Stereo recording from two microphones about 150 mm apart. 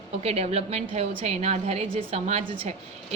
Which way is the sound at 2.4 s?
35° right (ahead or behind).